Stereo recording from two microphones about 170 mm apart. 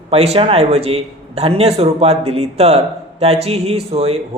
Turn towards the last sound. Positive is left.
turn(degrees=-35)  # may be behind; listen again after turning